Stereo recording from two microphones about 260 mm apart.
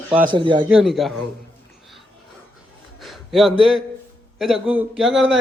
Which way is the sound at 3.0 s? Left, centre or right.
Centre.